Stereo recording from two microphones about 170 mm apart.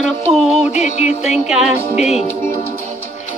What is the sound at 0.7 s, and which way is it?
Music, 40° left (ahead or behind).